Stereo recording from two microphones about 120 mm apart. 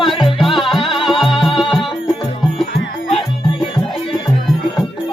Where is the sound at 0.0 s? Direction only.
45° left (ahead or behind).